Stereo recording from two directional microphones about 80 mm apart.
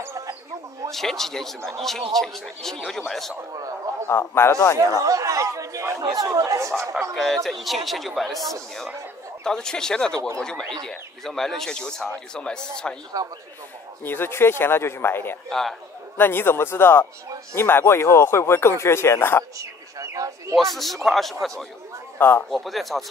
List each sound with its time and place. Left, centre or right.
0.9 s speech: centre
4.1 s speech: left
4.7 s speech: right
7.0 s speech: centre
13.2 s speech: right
14.0 s speech: left
19.6 s bird: right
20.5 s speech: centre